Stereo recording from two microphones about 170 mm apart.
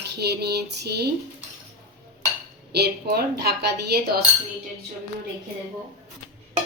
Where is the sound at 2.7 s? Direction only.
70° right (ahead or behind).